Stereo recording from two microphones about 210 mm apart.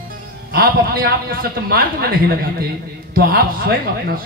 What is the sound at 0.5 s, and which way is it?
A man's voice, 45° right (ahead or behind).